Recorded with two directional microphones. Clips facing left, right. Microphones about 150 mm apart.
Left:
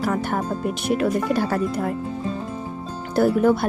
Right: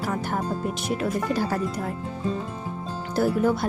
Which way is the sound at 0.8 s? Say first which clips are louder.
Left 6 dB; 65° left (ahead or behind).